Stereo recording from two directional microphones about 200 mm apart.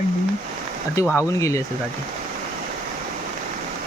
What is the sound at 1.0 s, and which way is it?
Speech, 10° right (ahead or behind).